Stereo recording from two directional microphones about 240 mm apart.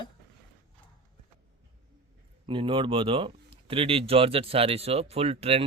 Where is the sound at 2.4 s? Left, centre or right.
Right.